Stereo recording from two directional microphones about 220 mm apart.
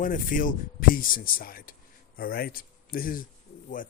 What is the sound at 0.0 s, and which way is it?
Speech, 35° left (ahead or behind).